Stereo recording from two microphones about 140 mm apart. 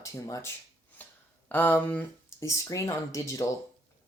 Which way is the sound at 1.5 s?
10° left (ahead or behind).